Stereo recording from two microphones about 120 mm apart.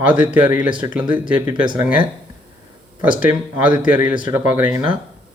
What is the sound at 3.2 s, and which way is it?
Speech, 15° right (ahead or behind).